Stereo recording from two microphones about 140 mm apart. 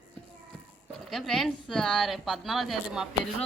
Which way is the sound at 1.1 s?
Centre (ahead or behind).